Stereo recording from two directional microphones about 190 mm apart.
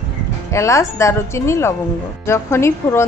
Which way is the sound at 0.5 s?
15° left (ahead or behind).